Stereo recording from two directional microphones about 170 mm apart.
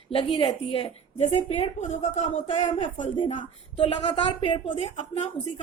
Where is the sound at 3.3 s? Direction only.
30° left (ahead or behind).